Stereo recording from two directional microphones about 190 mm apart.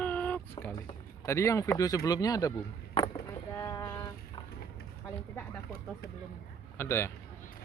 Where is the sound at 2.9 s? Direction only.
25° left (ahead or behind).